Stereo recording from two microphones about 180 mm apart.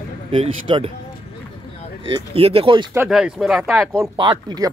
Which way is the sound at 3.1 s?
5° right (ahead or behind).